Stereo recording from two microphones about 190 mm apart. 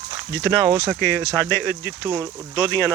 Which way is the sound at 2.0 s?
20° right (ahead or behind).